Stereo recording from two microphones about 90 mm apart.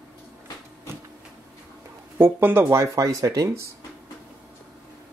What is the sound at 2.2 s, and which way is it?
Speech, 25° right (ahead or behind).